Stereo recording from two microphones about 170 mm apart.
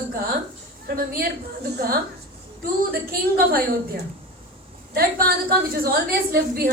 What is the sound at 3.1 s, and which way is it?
A woman's voice, 60° right (ahead or behind).